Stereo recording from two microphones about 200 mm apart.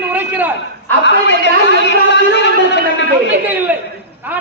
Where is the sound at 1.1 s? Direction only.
60° left (ahead or behind).